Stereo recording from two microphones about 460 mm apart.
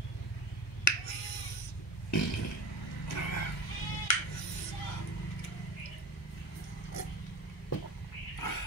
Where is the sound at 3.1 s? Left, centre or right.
Left.